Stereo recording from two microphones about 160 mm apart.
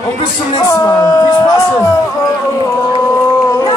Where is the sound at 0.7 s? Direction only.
20° left (ahead or behind).